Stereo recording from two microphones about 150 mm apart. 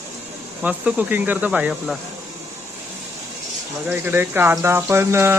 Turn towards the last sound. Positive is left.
turn(degrees=-15)  # may be behind; listen again after turning